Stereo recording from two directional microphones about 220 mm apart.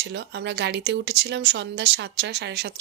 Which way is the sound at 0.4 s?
50° right (ahead or behind).